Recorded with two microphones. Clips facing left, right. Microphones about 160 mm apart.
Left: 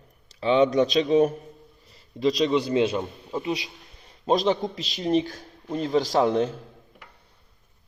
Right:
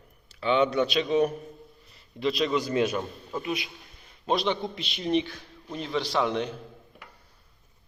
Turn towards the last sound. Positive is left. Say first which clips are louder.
# left 5 dB
turn(degrees=40)  # may be behind; listen again after turning